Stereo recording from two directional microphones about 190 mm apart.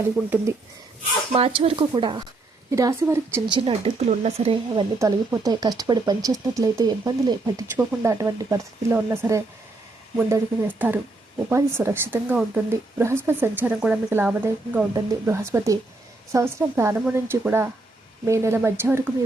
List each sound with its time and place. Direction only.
1.3 s speech: 30° right (ahead or behind)
3.5 s speech: 30° right (ahead or behind)
4.9 s speech: 15° right (ahead or behind)